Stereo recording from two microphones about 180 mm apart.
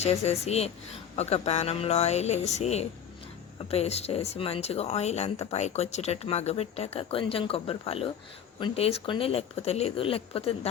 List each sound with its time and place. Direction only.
0.0 s speech: 35° left (ahead or behind)